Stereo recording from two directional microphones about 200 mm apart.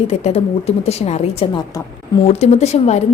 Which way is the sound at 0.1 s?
35° left (ahead or behind).